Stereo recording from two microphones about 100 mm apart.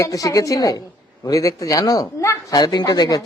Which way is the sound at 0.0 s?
35° left (ahead or behind).